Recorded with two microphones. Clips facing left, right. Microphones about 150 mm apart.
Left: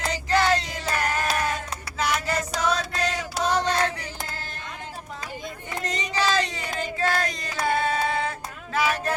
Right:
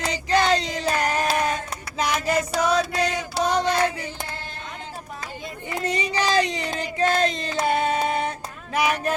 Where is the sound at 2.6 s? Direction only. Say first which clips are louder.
Right 3 dB; 10° right (ahead or behind).